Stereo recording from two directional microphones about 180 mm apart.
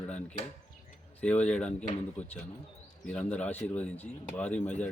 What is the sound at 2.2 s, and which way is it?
Speech, 40° left (ahead or behind).